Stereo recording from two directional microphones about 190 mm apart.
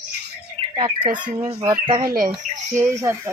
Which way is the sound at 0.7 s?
25° right (ahead or behind).